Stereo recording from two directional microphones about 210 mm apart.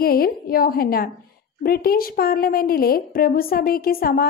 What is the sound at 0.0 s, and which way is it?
A woman's voice, 45° left (ahead or behind).